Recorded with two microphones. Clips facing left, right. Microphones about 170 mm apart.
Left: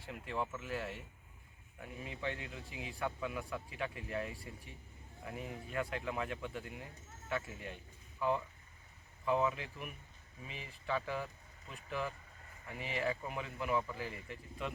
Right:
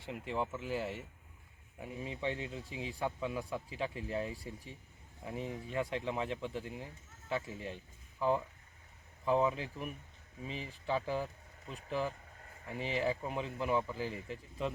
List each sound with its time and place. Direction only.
0.0 s speech: centre (ahead or behind)
0.6 s speech: 30° right (ahead or behind)
9.2 s speech: 30° right (ahead or behind)